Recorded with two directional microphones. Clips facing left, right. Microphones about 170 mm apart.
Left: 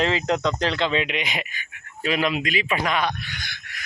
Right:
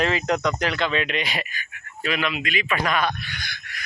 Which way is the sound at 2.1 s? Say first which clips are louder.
Left 3 dB; 35° left (ahead or behind).